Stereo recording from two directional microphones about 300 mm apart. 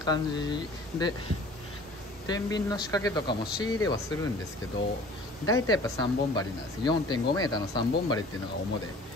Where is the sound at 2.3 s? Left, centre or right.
Centre.